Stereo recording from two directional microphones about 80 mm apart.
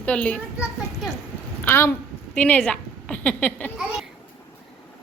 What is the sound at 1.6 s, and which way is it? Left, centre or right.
Speech, left.